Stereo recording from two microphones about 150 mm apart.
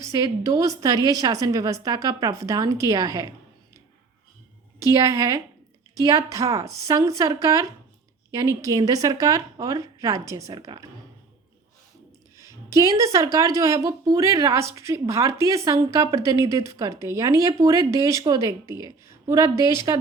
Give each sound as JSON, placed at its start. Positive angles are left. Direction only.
{"t": 0.0, "sound": "speech", "side_deg": -20}
{"t": 4.8, "sound": "speech", "side_deg": -20}
{"t": 12.4, "sound": "speech", "side_deg": -20}